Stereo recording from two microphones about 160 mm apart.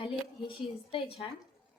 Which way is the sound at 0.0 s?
35° left (ahead or behind).